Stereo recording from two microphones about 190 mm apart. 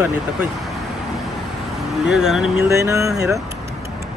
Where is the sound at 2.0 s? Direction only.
Centre (ahead or behind).